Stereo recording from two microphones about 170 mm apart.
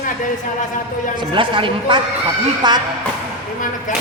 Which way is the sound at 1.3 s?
30° right (ahead or behind).